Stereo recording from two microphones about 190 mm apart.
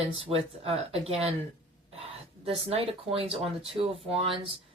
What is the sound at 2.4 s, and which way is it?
Speech, 30° right (ahead or behind).